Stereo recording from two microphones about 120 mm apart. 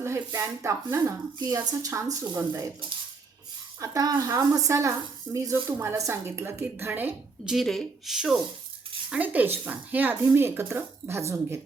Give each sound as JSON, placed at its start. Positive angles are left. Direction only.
{"t": 0.0, "sound": "speech", "side_deg": -25}
{"t": 3.8, "sound": "speech", "side_deg": -30}
{"t": 7.4, "sound": "speech", "side_deg": 0}